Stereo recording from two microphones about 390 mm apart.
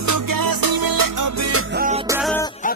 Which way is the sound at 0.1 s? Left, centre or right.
Right.